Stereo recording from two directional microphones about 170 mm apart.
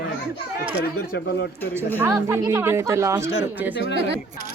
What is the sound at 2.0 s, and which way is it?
Speech, 15° right (ahead or behind).